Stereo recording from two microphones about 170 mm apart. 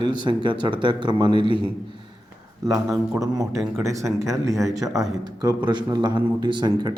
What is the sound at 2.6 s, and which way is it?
A man's voice, 20° right (ahead or behind).